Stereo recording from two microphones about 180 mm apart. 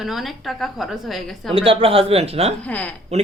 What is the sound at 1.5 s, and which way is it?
Speech, 30° right (ahead or behind).